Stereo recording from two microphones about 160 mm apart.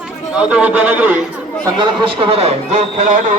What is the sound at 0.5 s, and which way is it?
Speech, 10° right (ahead or behind).